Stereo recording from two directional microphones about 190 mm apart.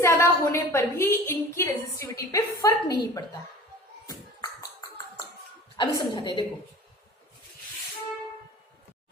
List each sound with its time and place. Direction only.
0.0 s a woman's voice: 15° left (ahead or behind)
4.1 s a sound: 20° left (ahead or behind)
5.7 s a woman's voice: 25° left (ahead or behind)